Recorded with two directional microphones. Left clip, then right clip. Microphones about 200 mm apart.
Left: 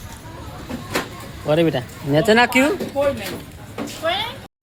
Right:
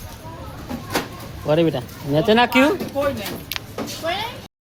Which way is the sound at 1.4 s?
5° left (ahead or behind).